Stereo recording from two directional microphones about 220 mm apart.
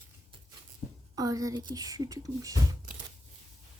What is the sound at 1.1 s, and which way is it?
Speech, 15° right (ahead or behind).